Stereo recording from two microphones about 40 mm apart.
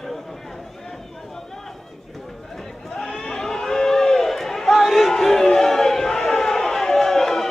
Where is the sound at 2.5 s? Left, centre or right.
Centre.